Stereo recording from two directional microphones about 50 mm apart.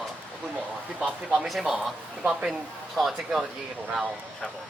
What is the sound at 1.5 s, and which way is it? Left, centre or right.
Speech, centre.